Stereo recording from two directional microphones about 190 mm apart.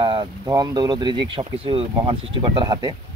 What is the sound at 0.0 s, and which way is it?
Speech, 25° right (ahead or behind).